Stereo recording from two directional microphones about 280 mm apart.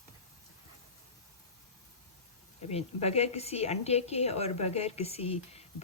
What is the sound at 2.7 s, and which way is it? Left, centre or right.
A woman's voice, left.